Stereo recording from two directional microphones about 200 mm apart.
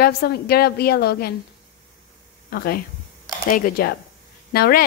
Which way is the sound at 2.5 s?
50° left (ahead or behind).